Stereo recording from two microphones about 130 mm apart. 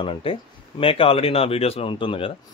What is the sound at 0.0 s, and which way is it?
Speech, 45° left (ahead or behind).